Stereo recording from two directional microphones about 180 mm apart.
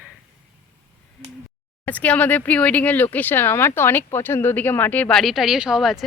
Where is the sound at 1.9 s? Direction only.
10° left (ahead or behind).